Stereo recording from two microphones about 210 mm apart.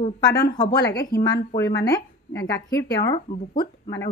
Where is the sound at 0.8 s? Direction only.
50° left (ahead or behind).